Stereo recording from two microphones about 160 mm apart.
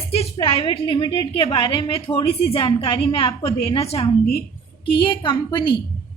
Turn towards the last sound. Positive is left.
turn(degrees=30)  # may be behind; listen again after turning